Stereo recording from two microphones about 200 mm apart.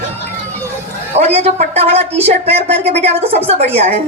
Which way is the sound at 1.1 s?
30° right (ahead or behind).